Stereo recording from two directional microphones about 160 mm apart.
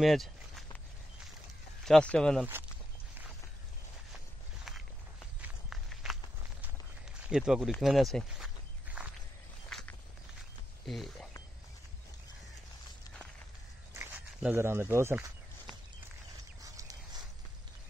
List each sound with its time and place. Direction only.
0.0 s walk: centre (ahead or behind)
1.9 s speech: 5° left (ahead or behind)
4.7 s walk: centre (ahead or behind)
7.2 s speech: 5° right (ahead or behind)
7.8 s walk: centre (ahead or behind)
10.9 s speech: centre (ahead or behind)
13.9 s speech: 10° right (ahead or behind)
16.6 s a sound: 20° right (ahead or behind)